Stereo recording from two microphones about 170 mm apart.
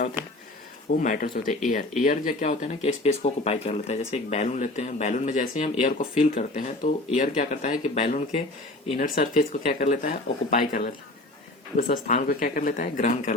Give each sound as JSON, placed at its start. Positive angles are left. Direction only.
{"t": 0.9, "sound": "speech", "side_deg": 55}
{"t": 9.0, "sound": "speech", "side_deg": 55}